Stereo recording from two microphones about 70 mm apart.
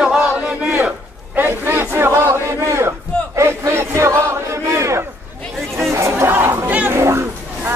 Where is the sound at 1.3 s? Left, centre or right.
Right.